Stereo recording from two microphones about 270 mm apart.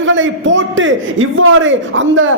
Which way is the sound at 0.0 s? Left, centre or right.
Right.